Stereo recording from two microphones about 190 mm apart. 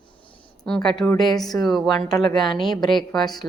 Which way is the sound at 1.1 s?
20° left (ahead or behind).